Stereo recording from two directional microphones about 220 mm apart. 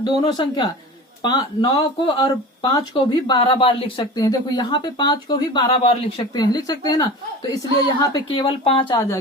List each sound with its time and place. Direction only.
0.0 s speech: 20° left (ahead or behind)